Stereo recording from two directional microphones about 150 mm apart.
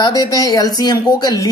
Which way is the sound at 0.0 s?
25° left (ahead or behind).